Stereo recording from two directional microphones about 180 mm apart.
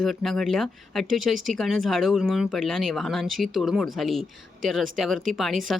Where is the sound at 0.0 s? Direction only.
Centre (ahead or behind).